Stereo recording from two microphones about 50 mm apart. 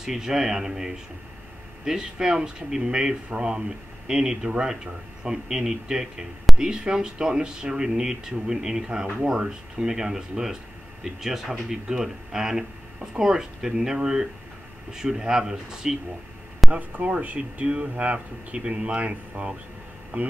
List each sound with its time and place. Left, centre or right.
0.0 s speech: centre
6.5 s a sound: centre
6.8 s speech: centre
16.7 s speech: right